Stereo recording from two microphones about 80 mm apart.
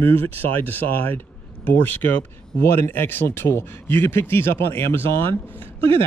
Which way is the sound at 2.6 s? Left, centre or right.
Left.